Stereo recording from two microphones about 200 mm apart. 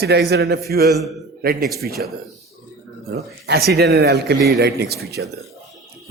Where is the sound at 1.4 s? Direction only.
50° right (ahead or behind).